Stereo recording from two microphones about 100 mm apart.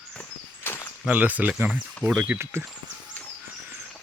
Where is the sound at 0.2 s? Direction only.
20° left (ahead or behind).